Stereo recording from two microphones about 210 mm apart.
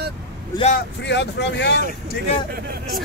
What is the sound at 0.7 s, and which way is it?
Speech, 55° left (ahead or behind).